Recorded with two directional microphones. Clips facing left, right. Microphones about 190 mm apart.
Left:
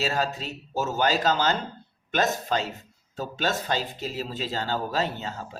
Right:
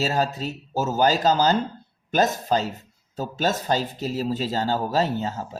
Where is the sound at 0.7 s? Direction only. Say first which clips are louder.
Right 4 dB; 40° right (ahead or behind).